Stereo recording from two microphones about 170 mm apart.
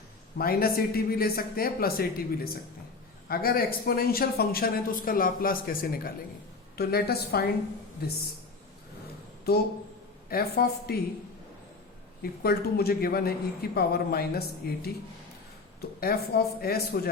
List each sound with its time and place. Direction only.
0.3 s a woman's voice: 60° left (ahead or behind)
10.2 s speech: 65° left (ahead or behind)
12.2 s speech: 65° left (ahead or behind)
16.0 s speech: 65° left (ahead or behind)